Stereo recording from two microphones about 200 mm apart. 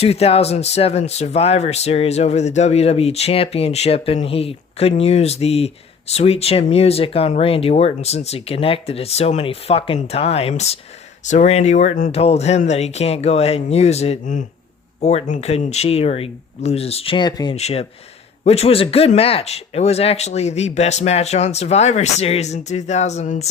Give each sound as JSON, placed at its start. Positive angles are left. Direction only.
{"t": 0.0, "sound": "speech", "side_deg": 30}